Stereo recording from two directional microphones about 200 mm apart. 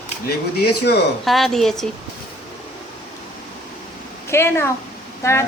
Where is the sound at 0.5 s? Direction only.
55° left (ahead or behind).